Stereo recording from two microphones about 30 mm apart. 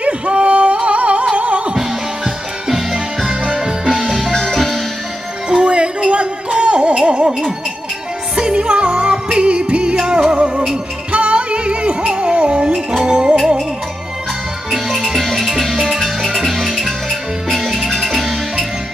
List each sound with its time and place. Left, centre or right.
0.0 s music: right
2.7 s music: centre
3.8 s music: centre
4.3 s music: centre
4.6 s music: centre
5.5 s music: right
8.6 s music: right
14.7 s music: centre